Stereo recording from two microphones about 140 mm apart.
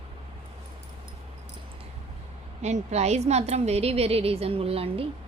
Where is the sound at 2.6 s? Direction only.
55° right (ahead or behind).